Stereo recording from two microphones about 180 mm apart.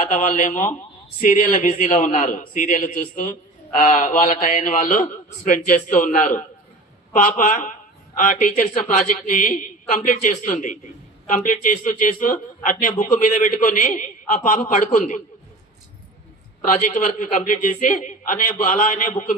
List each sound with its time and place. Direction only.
0.1 s a man's voice: 40° left (ahead or behind)
16.6 s a man's voice: 45° left (ahead or behind)